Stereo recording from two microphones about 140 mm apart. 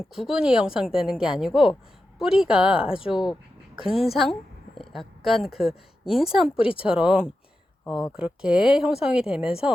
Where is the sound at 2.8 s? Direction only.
40° left (ahead or behind).